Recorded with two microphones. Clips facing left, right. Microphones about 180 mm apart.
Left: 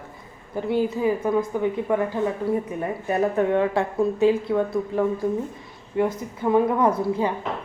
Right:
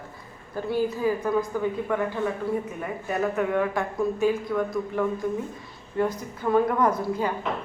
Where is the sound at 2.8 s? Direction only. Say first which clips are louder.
Left 5 dB; 30° left (ahead or behind).